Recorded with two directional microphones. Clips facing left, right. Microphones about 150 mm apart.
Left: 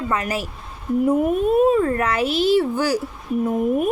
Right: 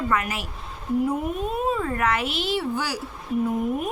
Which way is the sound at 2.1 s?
40° left (ahead or behind).